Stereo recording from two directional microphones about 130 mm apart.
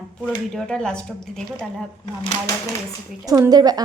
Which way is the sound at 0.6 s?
5° left (ahead or behind).